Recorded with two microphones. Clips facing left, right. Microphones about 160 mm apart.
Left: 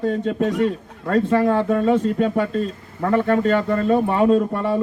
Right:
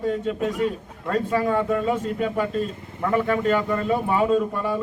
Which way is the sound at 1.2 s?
60° left (ahead or behind).